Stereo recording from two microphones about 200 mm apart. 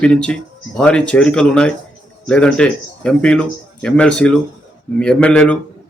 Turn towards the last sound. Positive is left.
turn(degrees=5)  # may be behind; listen again after turning